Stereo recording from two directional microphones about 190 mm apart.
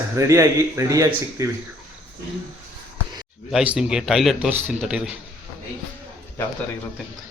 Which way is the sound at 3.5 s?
5° right (ahead or behind).